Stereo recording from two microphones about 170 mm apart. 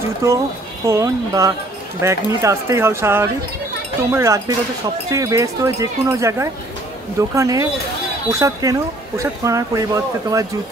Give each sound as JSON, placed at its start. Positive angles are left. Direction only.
{"t": 0.2, "sound": "speech", "side_deg": -15}